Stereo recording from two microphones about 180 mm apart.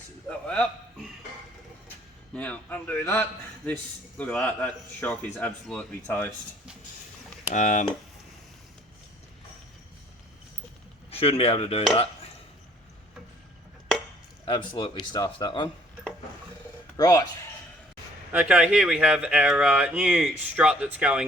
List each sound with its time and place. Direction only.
0.3 s a man's voice: 5° left (ahead or behind)
2.3 s speech: 10° left (ahead or behind)
7.5 s speech: 45° left (ahead or behind)
11.1 s speech: 35° left (ahead or behind)
14.4 s speech: 25° left (ahead or behind)
17.0 s speech: 20° left (ahead or behind)
18.3 s speech: 10° right (ahead or behind)